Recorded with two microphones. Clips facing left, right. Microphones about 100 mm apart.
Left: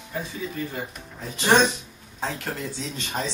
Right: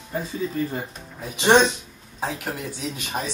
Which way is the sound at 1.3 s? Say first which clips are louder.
Right 3 dB; 20° right (ahead or behind).